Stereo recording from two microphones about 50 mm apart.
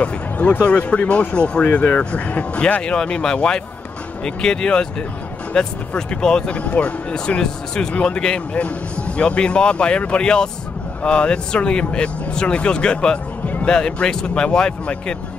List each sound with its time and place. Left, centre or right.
0.0 s speech: left
6.5 s speech: left